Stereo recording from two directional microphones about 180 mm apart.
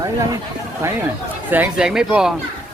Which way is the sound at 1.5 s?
10° right (ahead or behind).